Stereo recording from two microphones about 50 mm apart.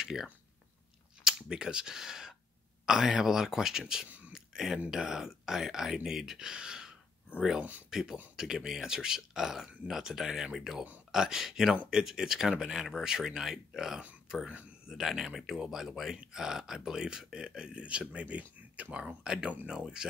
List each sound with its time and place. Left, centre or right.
0.0 s speech: centre
4.3 s a sound: centre
4.9 s speech: centre; by 18.9 s right
18.9 s speech: centre